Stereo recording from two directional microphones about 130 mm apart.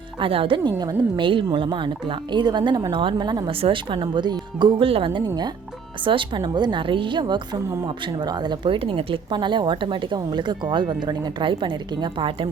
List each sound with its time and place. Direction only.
0.2 s a woman's voice: 45° right (ahead or behind)